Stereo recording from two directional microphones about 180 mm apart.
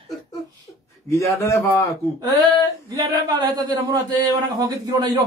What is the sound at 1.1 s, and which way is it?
Speech, 15° left (ahead or behind).